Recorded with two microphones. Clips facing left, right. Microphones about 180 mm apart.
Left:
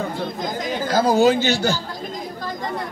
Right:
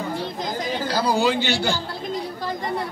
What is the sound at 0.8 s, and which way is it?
Speech, 45° left (ahead or behind).